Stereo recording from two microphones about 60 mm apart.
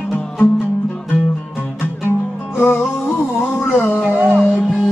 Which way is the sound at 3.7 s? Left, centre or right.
Left.